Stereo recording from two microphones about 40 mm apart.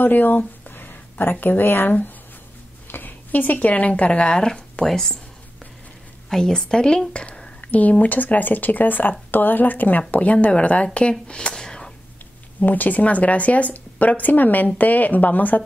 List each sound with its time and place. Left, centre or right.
0.0 s a sound: left
1.6 s speech: left
2.9 s speech: left; by 5.1 s centre
6.3 s a woman's voice: centre
7.1 s a sound: left
7.6 s speech: left; by 11.9 s centre
12.5 s speech: left